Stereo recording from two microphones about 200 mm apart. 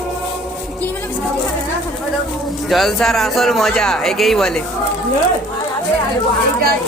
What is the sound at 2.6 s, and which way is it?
Speech, centre (ahead or behind).